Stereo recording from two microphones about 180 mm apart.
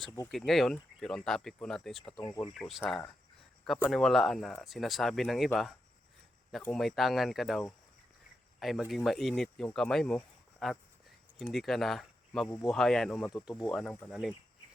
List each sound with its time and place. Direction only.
0.3 s speech: centre (ahead or behind)
2.2 s speech: 20° left (ahead or behind)
2.6 s speech: centre (ahead or behind)
6.5 s speech: centre (ahead or behind)